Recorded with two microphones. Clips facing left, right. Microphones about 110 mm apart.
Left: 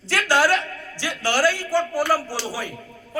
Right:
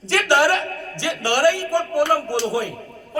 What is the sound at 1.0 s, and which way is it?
Speech, 20° right (ahead or behind).